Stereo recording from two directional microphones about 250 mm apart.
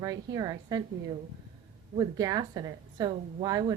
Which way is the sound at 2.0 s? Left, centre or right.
Centre.